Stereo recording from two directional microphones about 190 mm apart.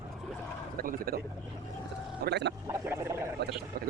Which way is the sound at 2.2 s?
65° right (ahead or behind).